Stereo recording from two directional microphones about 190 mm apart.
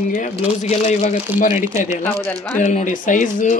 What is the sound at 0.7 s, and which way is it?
Speech, 40° left (ahead or behind).